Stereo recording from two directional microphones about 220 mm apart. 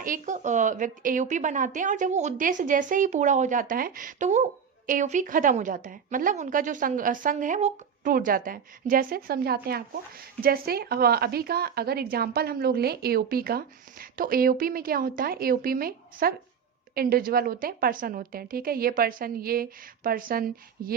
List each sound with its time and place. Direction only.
0.0 s a woman's voice: 35° right (ahead or behind)